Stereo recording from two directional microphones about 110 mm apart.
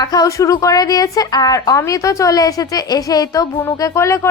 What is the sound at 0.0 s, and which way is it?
A woman's voice, 35° left (ahead or behind).